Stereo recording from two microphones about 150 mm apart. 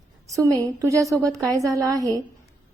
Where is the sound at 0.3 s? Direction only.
20° right (ahead or behind).